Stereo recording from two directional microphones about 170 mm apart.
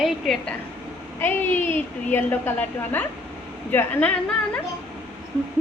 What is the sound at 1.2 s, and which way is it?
A woman's voice, 10° left (ahead or behind).